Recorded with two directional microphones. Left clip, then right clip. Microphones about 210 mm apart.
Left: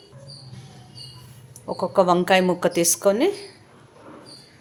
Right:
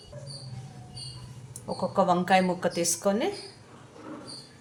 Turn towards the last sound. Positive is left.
turn(degrees=50)  # may be behind; listen again after turning